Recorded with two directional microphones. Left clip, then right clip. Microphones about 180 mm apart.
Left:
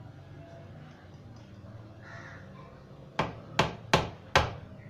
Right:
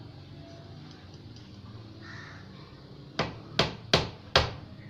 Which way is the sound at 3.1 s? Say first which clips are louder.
Even; 40° left (ahead or behind).